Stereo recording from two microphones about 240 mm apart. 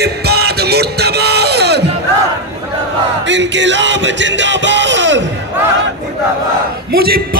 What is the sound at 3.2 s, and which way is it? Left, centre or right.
Music, right.